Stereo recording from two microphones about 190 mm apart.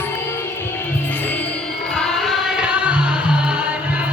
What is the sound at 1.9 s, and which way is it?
Music, centre (ahead or behind).